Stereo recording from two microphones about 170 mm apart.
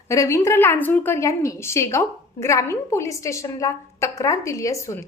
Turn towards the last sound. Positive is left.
turn(degrees=15)  # may be behind; listen again after turning